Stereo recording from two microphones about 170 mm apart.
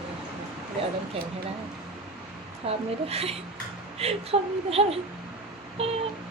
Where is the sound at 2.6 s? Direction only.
35° right (ahead or behind).